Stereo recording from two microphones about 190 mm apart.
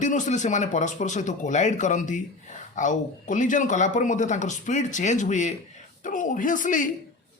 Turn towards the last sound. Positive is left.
turn(degrees=45)  # may be behind; listen again after turning